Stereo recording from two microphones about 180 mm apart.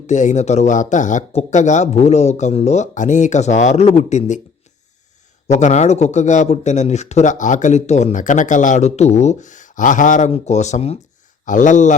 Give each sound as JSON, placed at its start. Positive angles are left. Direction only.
{"t": 0.1, "sound": "speech", "side_deg": 40}
{"t": 5.5, "sound": "speech", "side_deg": 40}